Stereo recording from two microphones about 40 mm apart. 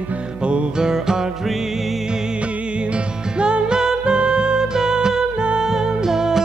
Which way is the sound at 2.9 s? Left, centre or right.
Right.